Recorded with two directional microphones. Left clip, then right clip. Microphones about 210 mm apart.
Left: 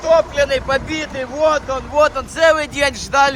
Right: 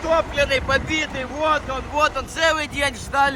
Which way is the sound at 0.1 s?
55° left (ahead or behind).